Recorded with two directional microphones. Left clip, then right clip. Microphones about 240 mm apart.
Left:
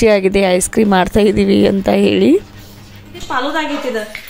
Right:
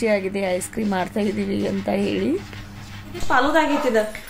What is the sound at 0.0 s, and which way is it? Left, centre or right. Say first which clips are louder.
A woman's voice: left 10 dB; left.